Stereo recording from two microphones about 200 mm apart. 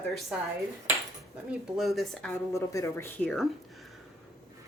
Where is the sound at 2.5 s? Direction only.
15° left (ahead or behind).